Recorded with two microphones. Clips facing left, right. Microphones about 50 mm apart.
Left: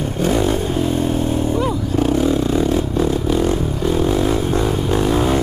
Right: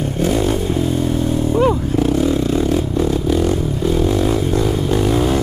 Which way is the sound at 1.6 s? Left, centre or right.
Right.